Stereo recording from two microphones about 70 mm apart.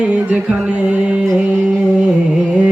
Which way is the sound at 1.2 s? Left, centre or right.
Centre.